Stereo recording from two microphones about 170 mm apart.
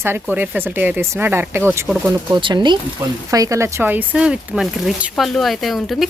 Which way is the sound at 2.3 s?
25° right (ahead or behind).